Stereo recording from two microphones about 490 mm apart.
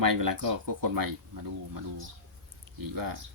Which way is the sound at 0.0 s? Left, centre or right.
Right.